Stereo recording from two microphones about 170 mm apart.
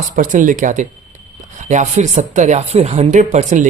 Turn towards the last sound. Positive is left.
turn(degrees=-45)  # may be behind; listen again after turning